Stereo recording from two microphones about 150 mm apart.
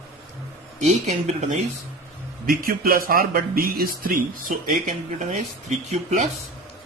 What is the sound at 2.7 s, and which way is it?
Speech, 75° right (ahead or behind).